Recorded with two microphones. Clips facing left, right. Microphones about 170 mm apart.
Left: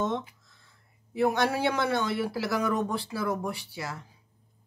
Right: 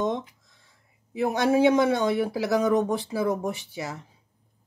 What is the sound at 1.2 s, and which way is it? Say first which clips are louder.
Speech: right 5 dB; 20° right (ahead or behind).